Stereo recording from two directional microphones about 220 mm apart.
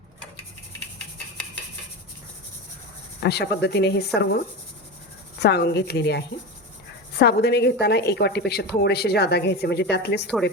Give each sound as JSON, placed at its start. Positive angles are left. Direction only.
{"t": 3.2, "sound": "a woman's voice", "side_deg": 50}